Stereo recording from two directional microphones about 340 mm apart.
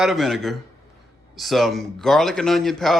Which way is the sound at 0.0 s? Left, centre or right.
Centre.